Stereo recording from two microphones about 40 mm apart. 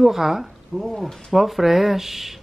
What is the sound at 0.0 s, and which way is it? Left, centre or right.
A woman's voice, centre.